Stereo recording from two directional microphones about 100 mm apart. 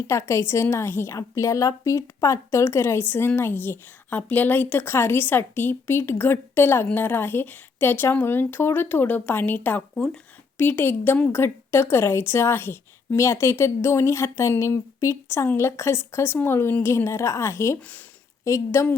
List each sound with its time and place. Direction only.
0.1 s a woman's voice: 30° left (ahead or behind)
17.7 s speech: 15° left (ahead or behind)
18.4 s a woman's voice: 30° left (ahead or behind)